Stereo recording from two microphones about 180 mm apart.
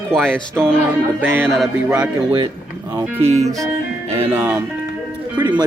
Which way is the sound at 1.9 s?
25° right (ahead or behind).